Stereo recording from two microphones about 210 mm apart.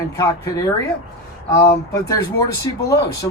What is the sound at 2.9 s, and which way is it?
Speech, 50° left (ahead or behind).